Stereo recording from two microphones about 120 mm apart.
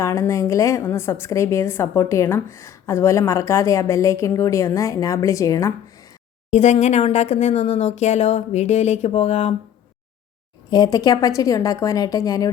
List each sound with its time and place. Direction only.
0.0 s a woman's voice: 25° left (ahead or behind)
6.5 s speech: 75° left (ahead or behind)
10.7 s a woman's voice: 35° left (ahead or behind)